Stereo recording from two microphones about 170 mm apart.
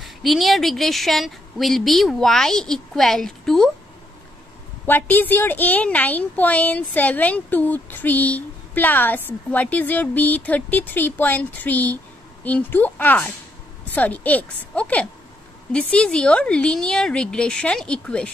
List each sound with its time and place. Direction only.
0.0 s speech: centre (ahead or behind)
4.8 s a woman's voice: 10° left (ahead or behind)